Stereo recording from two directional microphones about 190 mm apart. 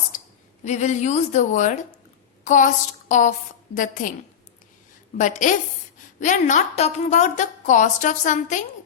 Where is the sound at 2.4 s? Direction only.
40° left (ahead or behind).